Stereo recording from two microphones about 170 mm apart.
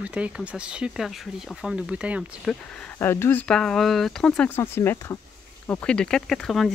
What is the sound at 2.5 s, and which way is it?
Speech, 5° left (ahead or behind).